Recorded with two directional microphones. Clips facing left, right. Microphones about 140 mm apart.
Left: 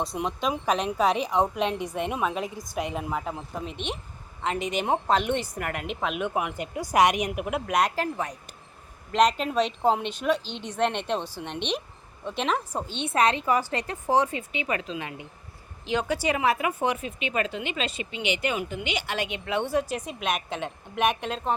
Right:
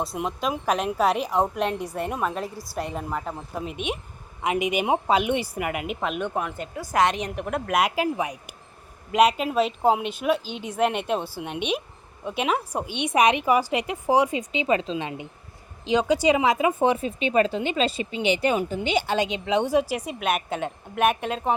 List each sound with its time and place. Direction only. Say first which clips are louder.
0.0 s speech: right 1 dB; 5° right (ahead or behind)
2.4 s a woman's voice: even; 20° left (ahead or behind)
2.7 s speech: even; 5° left (ahead or behind)
7.7 s a woman's voice: right 3 dB; 5° right (ahead or behind)